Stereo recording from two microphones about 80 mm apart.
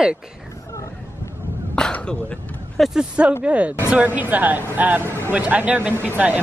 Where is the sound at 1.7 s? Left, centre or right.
Centre.